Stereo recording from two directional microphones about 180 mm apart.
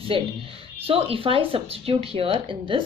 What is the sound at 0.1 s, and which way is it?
A woman's voice, 30° right (ahead or behind).